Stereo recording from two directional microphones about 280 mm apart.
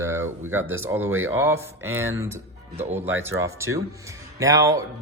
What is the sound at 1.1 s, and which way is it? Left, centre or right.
Speech, right.